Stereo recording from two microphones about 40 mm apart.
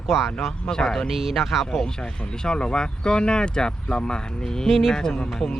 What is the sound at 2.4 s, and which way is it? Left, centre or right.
Speech, left.